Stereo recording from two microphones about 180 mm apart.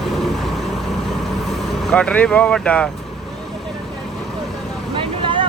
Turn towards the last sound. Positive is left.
turn(degrees=-30)  # may be behind; listen again after turning